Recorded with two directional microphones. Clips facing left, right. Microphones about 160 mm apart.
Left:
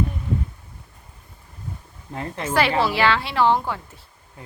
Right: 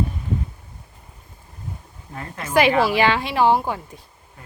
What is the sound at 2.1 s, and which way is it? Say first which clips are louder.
Speech: left 4 dB; 25° left (ahead or behind).